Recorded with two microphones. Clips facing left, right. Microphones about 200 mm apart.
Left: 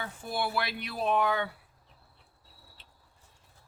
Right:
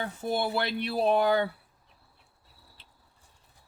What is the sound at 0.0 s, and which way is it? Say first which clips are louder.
Speech: right 4 dB; 35° right (ahead or behind).